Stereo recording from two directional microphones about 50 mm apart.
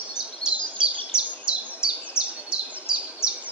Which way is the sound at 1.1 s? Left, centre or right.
Centre.